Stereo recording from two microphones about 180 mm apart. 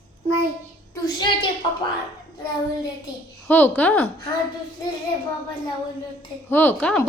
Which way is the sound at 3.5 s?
10° left (ahead or behind).